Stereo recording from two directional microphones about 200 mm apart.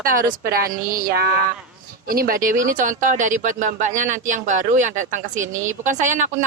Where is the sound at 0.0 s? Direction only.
45° right (ahead or behind).